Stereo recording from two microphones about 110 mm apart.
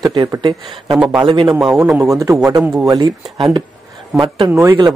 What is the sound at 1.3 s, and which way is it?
Speech, 45° right (ahead or behind).